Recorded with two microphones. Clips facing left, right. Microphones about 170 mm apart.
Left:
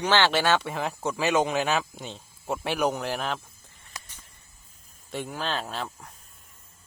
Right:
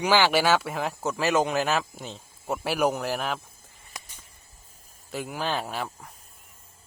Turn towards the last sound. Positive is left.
turn(degrees=-10)  # may be behind; listen again after turning